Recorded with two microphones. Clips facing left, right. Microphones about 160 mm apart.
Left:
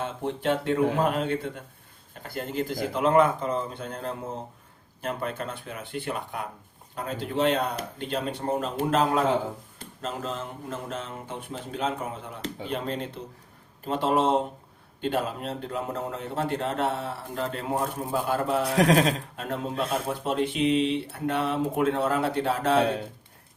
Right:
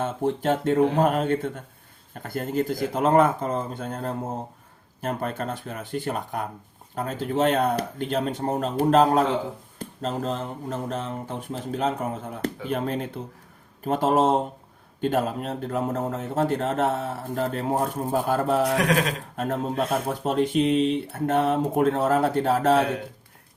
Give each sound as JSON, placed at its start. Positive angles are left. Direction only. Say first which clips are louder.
{"t": 0.0, "sound": "speech", "louder": "right 4 dB", "side_deg": -45}
{"t": 18.8, "sound": "speech", "louder": "left 3 dB", "side_deg": 30}
{"t": 19.4, "sound": "speech", "louder": "right 4 dB", "side_deg": -45}